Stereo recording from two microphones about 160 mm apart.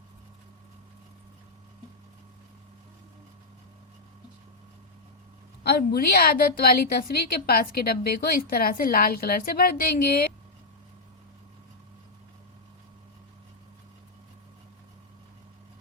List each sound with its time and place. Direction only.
5.6 s a woman's voice: 75° left (ahead or behind)